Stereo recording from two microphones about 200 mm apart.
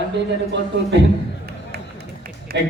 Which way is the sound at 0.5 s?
60° right (ahead or behind).